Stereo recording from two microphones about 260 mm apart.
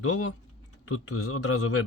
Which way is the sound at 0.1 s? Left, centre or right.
Left.